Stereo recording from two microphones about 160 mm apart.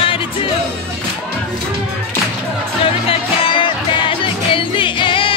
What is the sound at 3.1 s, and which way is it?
Music, 35° left (ahead or behind).